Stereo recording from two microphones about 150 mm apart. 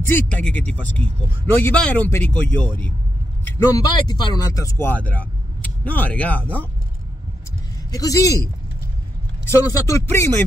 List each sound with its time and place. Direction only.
0.0 s speech: 10° left (ahead or behind)
3.6 s speech: 25° left (ahead or behind)
7.9 s speech: 25° left (ahead or behind)
9.5 s speech: 20° left (ahead or behind)